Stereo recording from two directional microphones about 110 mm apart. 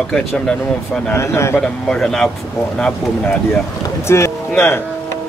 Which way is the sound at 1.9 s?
5° left (ahead or behind).